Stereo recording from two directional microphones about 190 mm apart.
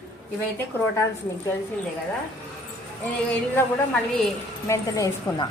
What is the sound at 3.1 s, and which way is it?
A woman's voice, 5° left (ahead or behind).